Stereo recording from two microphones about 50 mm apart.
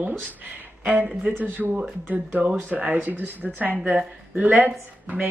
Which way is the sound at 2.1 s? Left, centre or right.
Right.